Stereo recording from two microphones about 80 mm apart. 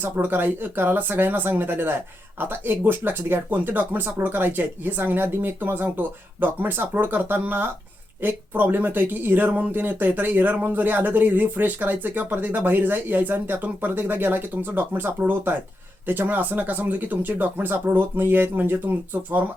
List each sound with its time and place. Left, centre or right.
0.0 s speech: right